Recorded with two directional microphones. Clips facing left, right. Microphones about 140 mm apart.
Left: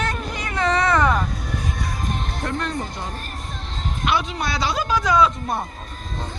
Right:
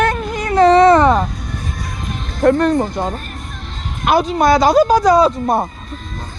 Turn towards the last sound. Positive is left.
turn(degrees=-40)  # may be behind; listen again after turning